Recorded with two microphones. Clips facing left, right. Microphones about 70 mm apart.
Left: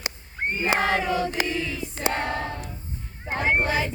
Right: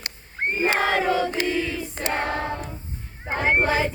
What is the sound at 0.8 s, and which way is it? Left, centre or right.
Choir, right.